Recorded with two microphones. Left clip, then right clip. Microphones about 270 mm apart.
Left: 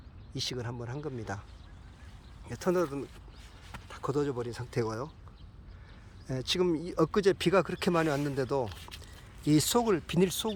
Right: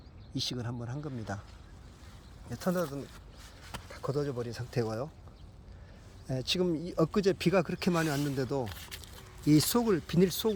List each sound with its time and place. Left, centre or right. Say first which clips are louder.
0.3 s speech: even; centre
2.5 s speech: left 3 dB; centre
6.2 s speech: left 2 dB; centre
8.6 s speech: left 2 dB; centre
9.5 s speech: even; centre